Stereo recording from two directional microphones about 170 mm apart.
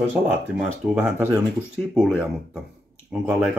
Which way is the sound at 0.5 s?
5° right (ahead or behind).